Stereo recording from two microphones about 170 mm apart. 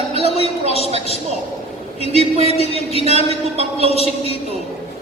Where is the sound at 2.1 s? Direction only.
35° right (ahead or behind).